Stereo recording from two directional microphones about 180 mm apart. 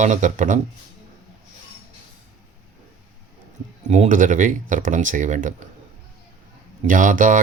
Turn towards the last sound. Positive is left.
turn(degrees=-45)  # may be behind; listen again after turning